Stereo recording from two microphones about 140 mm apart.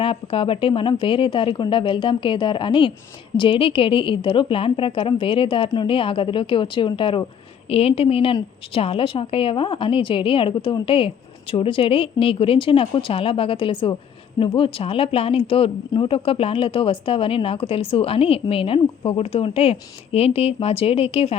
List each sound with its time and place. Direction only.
0.0 s a woman's voice: 40° left (ahead or behind)